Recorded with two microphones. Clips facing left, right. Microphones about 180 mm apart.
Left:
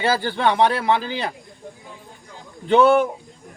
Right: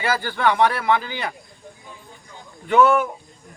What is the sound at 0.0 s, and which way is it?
Speech, 25° left (ahead or behind).